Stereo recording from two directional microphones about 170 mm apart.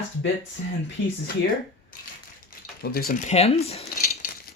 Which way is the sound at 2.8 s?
60° left (ahead or behind).